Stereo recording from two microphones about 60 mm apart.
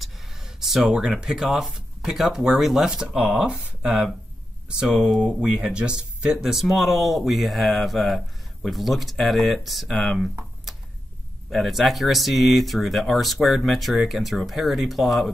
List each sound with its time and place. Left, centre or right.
0.0 s a sound: centre
2.0 s speech: centre
5.2 s speech: centre
6.4 s speech: centre